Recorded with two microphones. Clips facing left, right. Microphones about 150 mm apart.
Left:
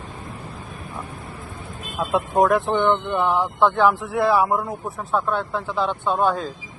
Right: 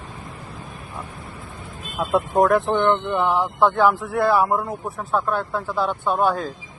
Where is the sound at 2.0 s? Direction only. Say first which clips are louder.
Right 1 dB; centre (ahead or behind).